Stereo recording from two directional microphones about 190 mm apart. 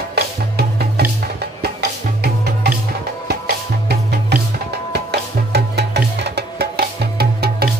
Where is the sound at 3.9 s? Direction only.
60° right (ahead or behind).